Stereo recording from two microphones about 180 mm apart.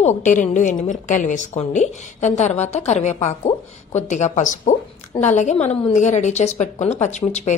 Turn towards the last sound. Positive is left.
turn(degrees=40)  # may be behind; listen again after turning